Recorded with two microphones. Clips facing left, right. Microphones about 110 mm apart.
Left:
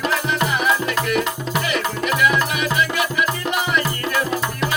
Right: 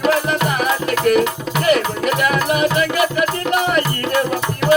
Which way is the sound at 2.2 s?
45° right (ahead or behind).